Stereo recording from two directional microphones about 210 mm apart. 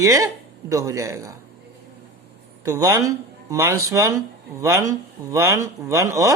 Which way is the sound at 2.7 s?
15° right (ahead or behind).